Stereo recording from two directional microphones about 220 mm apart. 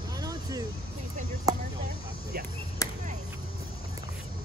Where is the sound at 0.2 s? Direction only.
15° right (ahead or behind).